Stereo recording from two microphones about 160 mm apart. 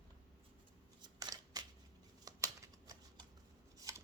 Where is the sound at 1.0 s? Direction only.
25° right (ahead or behind).